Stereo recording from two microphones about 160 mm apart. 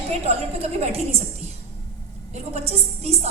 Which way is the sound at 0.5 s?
40° right (ahead or behind).